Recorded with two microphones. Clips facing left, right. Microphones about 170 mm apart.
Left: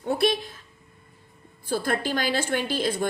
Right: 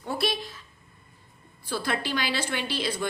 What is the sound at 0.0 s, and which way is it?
Speech, 55° left (ahead or behind).